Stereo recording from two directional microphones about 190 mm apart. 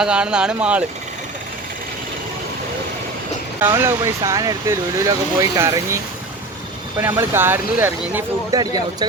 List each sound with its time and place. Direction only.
0.0 s speech: 5° right (ahead or behind)
3.6 s speech: 15° right (ahead or behind)
7.0 s speech: 10° right (ahead or behind)